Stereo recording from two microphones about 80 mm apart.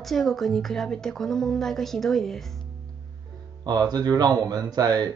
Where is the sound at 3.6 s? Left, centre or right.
Right.